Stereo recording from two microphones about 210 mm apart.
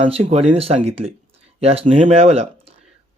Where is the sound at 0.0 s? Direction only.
30° right (ahead or behind).